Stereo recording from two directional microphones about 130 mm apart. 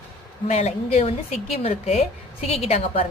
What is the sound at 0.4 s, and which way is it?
A man's voice, 60° left (ahead or behind).